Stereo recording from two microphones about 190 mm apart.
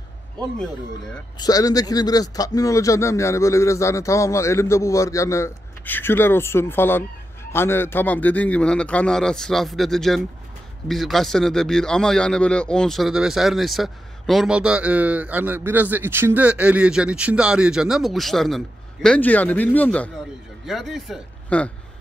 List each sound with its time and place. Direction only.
1.4 s speech: 20° left (ahead or behind)